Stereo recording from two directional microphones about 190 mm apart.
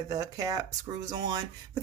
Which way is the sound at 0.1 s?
20° right (ahead or behind).